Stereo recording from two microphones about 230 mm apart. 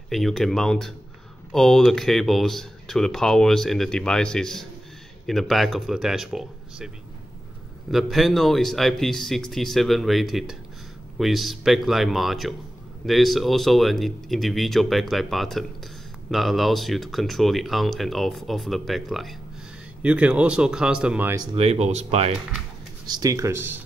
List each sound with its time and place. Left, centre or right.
0.1 s speech: centre
7.9 s speech: centre
21.5 s speech: right
23.0 s speech: centre